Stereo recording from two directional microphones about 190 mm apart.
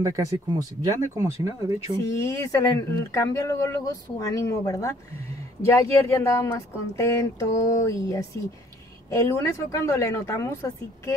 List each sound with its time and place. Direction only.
0.0 s speech: 20° right (ahead or behind)
2.0 s speech: 15° left (ahead or behind)